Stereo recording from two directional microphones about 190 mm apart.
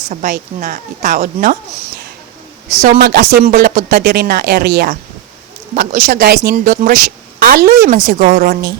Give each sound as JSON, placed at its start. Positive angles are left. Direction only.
{"t": 0.1, "sound": "a woman's voice", "side_deg": -50}
{"t": 3.0, "sound": "a woman's voice", "side_deg": -55}